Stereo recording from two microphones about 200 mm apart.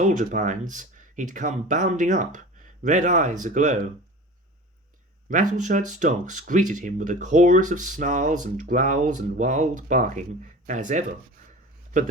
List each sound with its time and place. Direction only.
0.0 s speech: 40° right (ahead or behind)
5.3 s speech: 40° right (ahead or behind)